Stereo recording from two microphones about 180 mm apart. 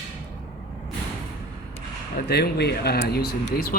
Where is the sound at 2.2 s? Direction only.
65° left (ahead or behind).